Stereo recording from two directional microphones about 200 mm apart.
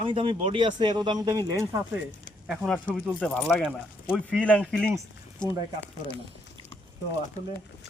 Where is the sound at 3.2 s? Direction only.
5° left (ahead or behind).